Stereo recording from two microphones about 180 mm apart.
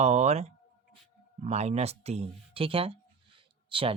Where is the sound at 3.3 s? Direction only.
30° right (ahead or behind).